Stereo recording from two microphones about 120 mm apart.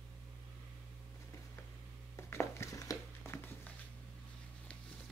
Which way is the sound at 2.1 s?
25° left (ahead or behind).